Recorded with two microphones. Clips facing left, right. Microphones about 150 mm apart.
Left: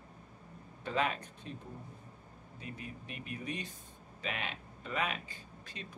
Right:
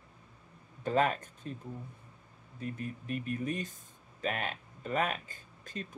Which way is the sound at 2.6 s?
45° right (ahead or behind).